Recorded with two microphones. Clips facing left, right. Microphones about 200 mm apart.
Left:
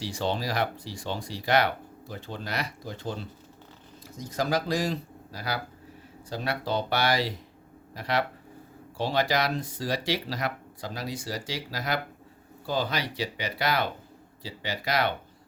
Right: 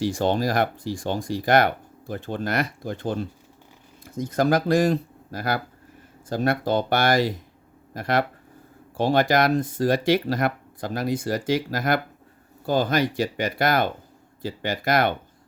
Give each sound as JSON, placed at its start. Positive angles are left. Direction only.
{"t": 0.0, "sound": "speech", "side_deg": -50}